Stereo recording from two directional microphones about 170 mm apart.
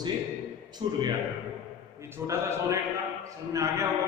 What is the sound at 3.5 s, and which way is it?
Speech, 15° right (ahead or behind).